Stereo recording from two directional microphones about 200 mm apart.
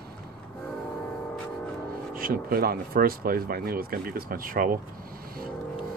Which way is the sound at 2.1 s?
45° right (ahead or behind).